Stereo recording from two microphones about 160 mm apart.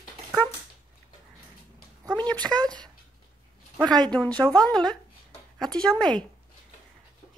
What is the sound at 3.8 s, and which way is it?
A child's voice, 5° left (ahead or behind).